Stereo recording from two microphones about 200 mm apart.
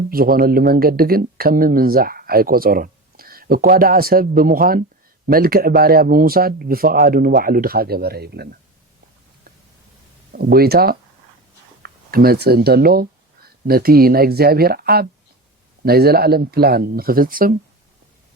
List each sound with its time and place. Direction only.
0.1 s speech: 50° right (ahead or behind)
10.3 s speech: 50° right (ahead or behind)